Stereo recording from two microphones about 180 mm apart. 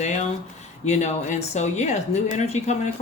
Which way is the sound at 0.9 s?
40° left (ahead or behind).